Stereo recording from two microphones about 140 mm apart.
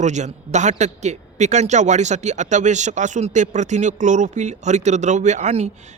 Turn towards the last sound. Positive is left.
turn(degrees=-55)  # may be behind; listen again after turning